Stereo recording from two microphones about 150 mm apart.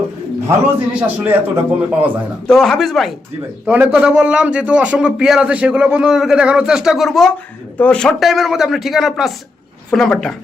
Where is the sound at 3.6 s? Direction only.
10° right (ahead or behind).